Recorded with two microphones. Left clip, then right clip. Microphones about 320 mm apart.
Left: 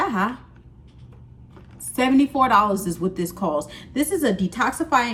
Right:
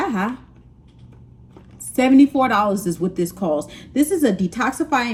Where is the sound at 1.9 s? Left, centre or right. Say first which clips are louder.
Right 4 dB; centre.